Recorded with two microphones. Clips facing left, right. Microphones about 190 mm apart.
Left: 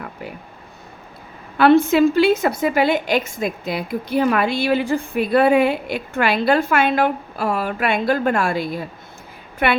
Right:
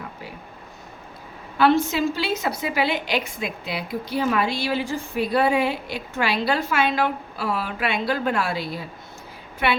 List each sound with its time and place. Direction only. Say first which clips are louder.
1.5 s a woman's voice: left 6 dB; 60° left (ahead or behind)